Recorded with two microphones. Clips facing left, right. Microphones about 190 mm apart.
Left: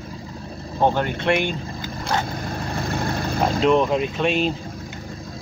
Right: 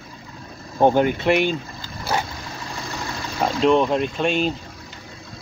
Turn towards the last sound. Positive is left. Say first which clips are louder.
# even
turn(degrees=0)  # may be behind; listen again after turning